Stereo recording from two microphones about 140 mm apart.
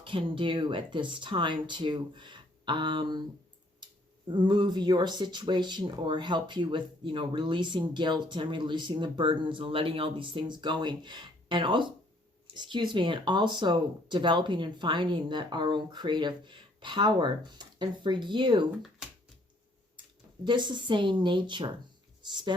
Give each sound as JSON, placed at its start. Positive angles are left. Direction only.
{"t": 0.0, "sound": "speech", "side_deg": -35}
{"t": 4.3, "sound": "speech", "side_deg": -35}
{"t": 20.4, "sound": "speech", "side_deg": -35}